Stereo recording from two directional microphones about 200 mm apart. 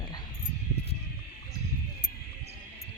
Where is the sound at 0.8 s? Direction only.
30° left (ahead or behind).